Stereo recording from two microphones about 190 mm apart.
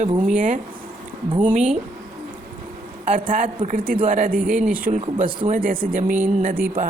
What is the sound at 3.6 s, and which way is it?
Speech, 50° right (ahead or behind).